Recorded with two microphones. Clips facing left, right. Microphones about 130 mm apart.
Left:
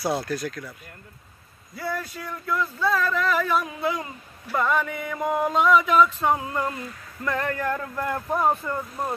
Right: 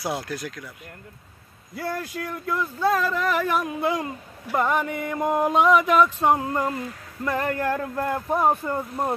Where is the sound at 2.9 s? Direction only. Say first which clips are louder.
Even; 15° right (ahead or behind).